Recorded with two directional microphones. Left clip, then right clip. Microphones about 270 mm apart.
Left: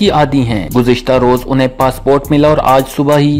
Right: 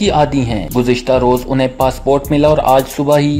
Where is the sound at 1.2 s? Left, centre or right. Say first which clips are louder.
Left 2 dB; left.